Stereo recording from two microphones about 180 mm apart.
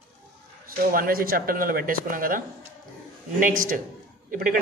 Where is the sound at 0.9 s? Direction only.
55° right (ahead or behind).